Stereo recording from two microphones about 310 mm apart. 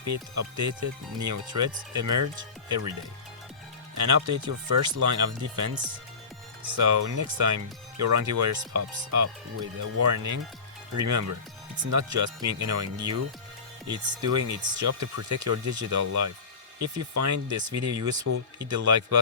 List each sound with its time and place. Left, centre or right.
0.0 s speech: right
3.9 s speech: right
13.9 s speech: right